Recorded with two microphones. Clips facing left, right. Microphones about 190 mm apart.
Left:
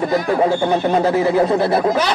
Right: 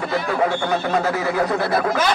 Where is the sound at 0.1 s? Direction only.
30° left (ahead or behind).